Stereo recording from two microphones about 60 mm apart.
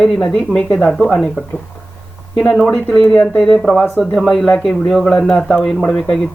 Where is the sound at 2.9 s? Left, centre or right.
Centre.